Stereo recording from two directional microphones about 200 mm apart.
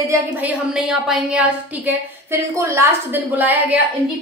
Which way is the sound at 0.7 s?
Centre (ahead or behind).